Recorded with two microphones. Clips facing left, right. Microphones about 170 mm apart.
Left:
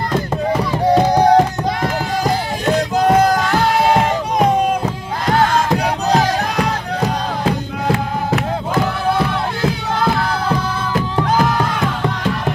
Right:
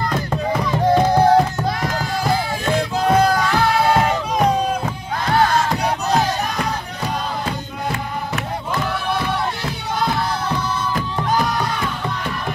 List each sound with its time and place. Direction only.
0.5 s music: 10° left (ahead or behind)
3.3 s music: 20° left (ahead or behind)
6.2 s music: 90° left
10.9 s music: 90° left